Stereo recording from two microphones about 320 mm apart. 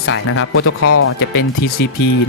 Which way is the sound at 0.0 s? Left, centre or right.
Left.